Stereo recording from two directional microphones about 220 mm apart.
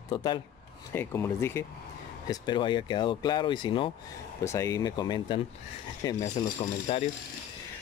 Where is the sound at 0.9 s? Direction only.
10° left (ahead or behind).